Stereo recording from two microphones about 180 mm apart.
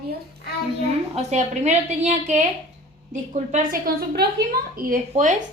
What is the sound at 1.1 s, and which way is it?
A woman's voice, 40° right (ahead or behind).